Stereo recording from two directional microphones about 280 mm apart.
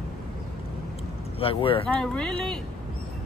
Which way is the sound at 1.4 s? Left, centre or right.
Centre.